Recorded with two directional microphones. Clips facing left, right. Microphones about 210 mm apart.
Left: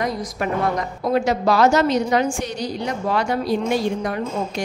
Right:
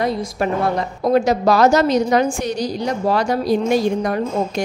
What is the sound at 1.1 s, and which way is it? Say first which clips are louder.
A woman's voice: right 3 dB; 40° right (ahead or behind).